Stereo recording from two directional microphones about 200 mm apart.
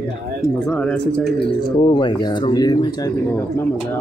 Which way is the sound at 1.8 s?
25° left (ahead or behind).